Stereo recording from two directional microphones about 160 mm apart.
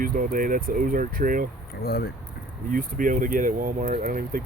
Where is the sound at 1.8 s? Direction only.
70° left (ahead or behind).